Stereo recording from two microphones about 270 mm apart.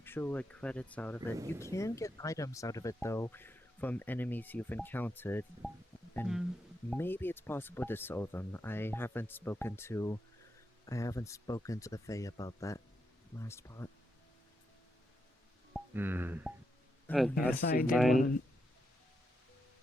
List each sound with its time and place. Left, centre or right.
0.0 s speech: centre
15.7 s a sound: centre
17.1 s speech: centre
17.6 s speech: left
17.9 s speech: centre